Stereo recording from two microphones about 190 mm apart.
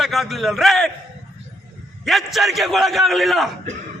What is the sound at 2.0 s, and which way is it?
A man's voice, centre (ahead or behind).